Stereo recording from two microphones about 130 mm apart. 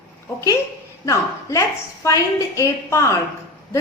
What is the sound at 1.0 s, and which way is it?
A woman's voice, 25° left (ahead or behind).